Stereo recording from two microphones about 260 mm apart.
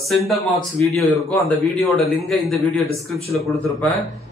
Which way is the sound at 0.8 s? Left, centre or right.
Centre.